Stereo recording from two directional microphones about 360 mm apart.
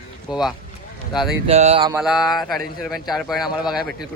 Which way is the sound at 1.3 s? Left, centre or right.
Centre.